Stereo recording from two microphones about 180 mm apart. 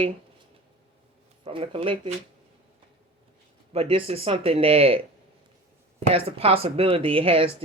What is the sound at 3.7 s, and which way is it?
Speech, 30° right (ahead or behind).